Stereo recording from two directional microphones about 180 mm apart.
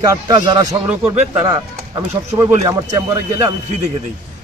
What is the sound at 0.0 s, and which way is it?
Speech, 20° right (ahead or behind).